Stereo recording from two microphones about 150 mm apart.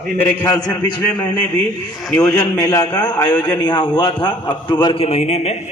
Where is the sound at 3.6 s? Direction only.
30° left (ahead or behind).